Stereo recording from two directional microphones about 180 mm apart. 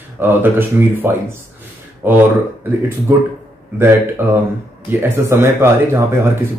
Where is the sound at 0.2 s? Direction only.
10° right (ahead or behind).